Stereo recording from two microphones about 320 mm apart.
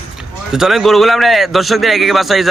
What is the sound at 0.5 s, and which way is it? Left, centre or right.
A man's voice, centre.